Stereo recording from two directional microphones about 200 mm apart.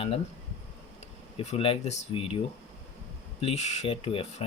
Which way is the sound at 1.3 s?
30° left (ahead or behind).